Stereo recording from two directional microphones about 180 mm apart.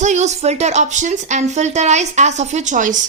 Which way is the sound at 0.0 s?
40° right (ahead or behind).